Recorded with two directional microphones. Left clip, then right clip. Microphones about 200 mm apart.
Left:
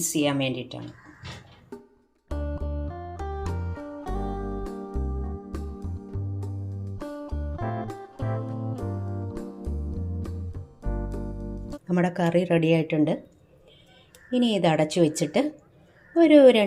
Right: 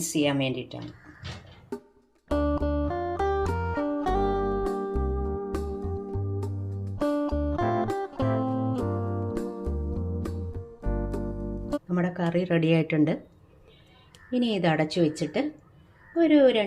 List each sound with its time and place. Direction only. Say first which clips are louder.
0.0 s a woman's voice: left 1 dB; 5° left (ahead or behind)
1.7 s music: right 6 dB; centre (ahead or behind)
11.9 s speech: left 7 dB; 20° left (ahead or behind); by 13.1 s 5° right (ahead or behind)
14.3 s a woman's voice: left 3 dB; 5° left (ahead or behind); by 16.6 s 20° left (ahead or behind)